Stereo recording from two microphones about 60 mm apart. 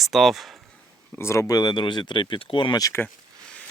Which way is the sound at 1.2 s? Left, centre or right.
Left.